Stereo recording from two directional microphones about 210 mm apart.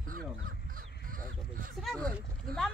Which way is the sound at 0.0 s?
40° right (ahead or behind).